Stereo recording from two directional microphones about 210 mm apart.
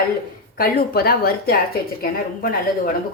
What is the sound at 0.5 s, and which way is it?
Speech, 45° left (ahead or behind).